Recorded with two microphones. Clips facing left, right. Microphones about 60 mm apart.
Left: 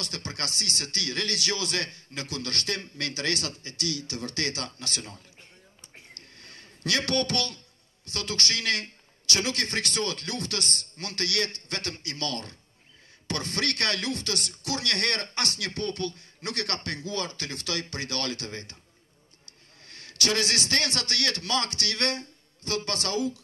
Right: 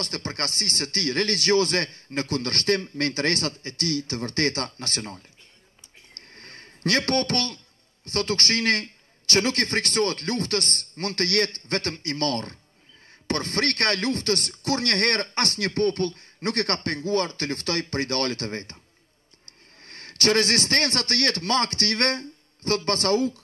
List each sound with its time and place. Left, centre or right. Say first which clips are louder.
0.0 s speech: right 5 dB; right
6.1 s a sound: right 4 dB; right
9.2 s speech: right 6 dB; right
19.8 s a man's voice: right 5 dB; right